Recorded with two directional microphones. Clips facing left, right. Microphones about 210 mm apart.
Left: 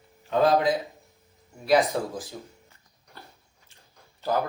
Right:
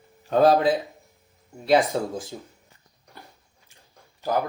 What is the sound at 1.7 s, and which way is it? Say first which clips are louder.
Speech: right 2 dB; 25° right (ahead or behind).